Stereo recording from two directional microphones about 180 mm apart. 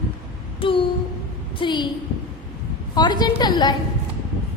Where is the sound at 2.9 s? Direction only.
25° left (ahead or behind).